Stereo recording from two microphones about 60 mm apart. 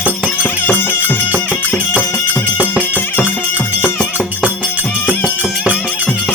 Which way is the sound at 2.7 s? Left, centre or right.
Left.